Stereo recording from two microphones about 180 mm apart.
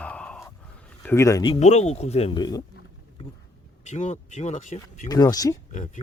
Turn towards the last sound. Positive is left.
turn(degrees=20)  # may be behind; listen again after turning